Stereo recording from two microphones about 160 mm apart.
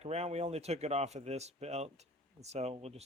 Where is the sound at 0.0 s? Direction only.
40° right (ahead or behind).